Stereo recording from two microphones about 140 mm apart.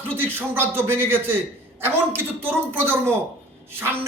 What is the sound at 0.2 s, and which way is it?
A man's voice, 15° right (ahead or behind).